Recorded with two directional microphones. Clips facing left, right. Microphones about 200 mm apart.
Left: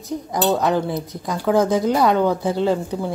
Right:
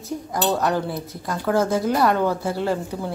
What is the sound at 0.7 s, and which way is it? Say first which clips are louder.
A woman's voice: left 3 dB; 15° left (ahead or behind).